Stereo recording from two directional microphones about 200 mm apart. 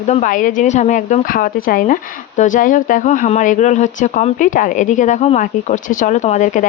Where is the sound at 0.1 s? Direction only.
40° left (ahead or behind).